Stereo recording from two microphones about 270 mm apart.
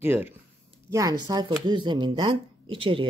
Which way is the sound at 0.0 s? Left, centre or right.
Centre.